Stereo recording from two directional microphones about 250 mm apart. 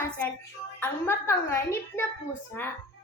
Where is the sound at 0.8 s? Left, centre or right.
Centre.